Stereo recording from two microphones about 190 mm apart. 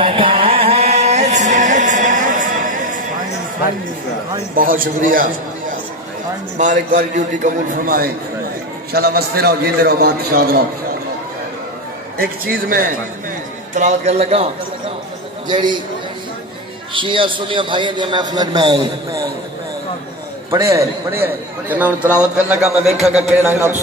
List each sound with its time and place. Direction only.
0.0 s music: 30° right (ahead or behind); by 3.1 s 45° right (ahead or behind)
4.6 s a man's voice: 45° right (ahead or behind)
12.2 s a man's voice: 50° right (ahead or behind)
13.7 s a man's voice: 35° right (ahead or behind)
16.9 s a man's voice: 25° right (ahead or behind)
20.5 s a man's voice: 15° right (ahead or behind)
22.8 s a man's voice: 35° right (ahead or behind)
23.1 s a man's voice: 5° right (ahead or behind)